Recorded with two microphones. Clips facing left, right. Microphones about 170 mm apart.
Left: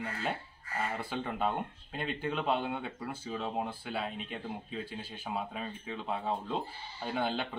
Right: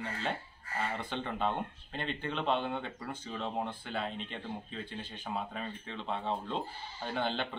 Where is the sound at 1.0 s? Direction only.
5° left (ahead or behind).